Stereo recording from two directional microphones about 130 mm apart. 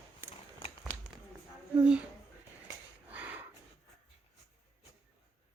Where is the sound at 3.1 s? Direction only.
10° right (ahead or behind).